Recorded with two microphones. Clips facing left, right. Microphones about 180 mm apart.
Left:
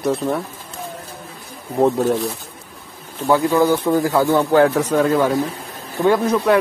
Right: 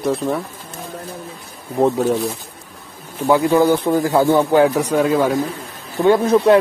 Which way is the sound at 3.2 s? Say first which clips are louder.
Right 2 dB; 15° right (ahead or behind).